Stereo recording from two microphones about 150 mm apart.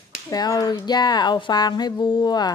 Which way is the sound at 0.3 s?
25° left (ahead or behind).